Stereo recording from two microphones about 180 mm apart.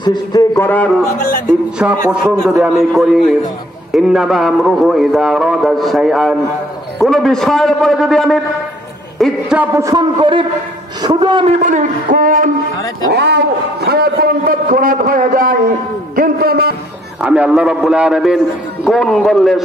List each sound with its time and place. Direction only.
0.0 s a man's voice: 25° left (ahead or behind)
0.7 s a man's voice: 10° left (ahead or behind)
1.8 s a man's voice: 5° right (ahead or behind)
9.8 s a man's voice: 20° right (ahead or behind)
11.5 s shofar: 45° right (ahead or behind)
13.1 s a man's voice: 65° right (ahead or behind)
17.2 s a man's voice: 5° right (ahead or behind)